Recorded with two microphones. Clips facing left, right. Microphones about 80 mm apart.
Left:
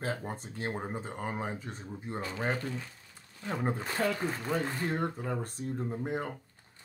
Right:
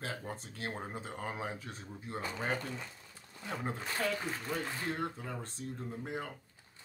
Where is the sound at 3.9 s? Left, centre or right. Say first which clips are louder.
Left 2 dB; left.